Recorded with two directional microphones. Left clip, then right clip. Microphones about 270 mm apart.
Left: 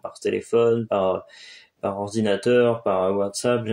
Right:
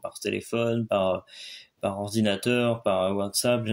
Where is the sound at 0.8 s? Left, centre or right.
Right.